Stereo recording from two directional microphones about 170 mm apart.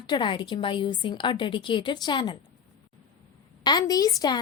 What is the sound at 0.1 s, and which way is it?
A woman's voice, 30° left (ahead or behind).